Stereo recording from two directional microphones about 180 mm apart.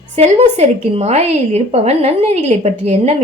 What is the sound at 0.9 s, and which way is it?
A woman's voice, 35° right (ahead or behind).